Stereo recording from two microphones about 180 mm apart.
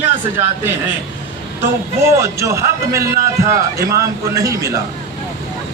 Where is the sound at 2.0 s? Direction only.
15° right (ahead or behind).